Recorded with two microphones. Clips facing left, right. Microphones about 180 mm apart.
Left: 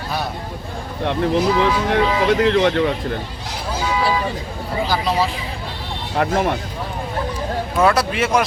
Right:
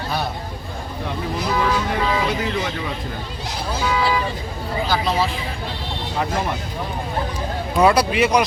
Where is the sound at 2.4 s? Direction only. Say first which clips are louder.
Left 9 dB; 70° left (ahead or behind).